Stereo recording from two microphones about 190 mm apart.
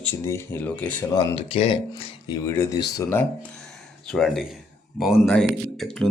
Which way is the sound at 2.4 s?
15° left (ahead or behind).